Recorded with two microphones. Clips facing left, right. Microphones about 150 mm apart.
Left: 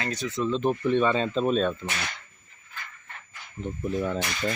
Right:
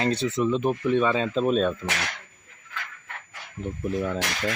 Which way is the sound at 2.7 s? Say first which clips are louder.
Right 5 dB; 90° right.